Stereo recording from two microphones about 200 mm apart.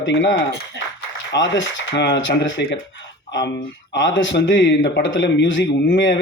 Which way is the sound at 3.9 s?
70° left (ahead or behind).